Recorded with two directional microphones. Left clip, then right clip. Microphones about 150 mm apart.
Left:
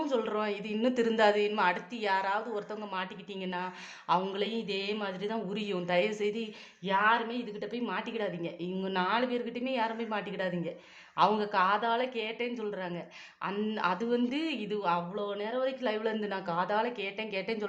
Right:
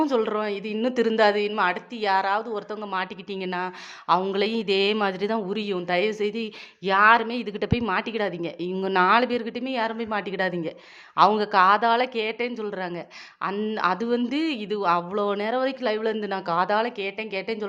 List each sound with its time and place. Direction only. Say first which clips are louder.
0.0 s speech: right 7 dB; 40° right (ahead or behind)
6.8 s speech: right 9 dB; 50° right (ahead or behind); by 17.7 s 25° right (ahead or behind)